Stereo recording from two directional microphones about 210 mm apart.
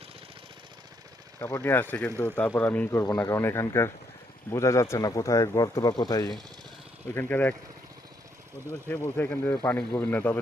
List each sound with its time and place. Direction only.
1.4 s speech: 10° left (ahead or behind)
8.9 s speech: 10° left (ahead or behind)